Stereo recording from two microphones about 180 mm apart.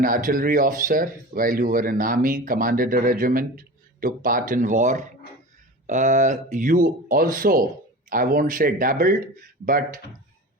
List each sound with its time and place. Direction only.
0.0 s speech: 50° right (ahead or behind)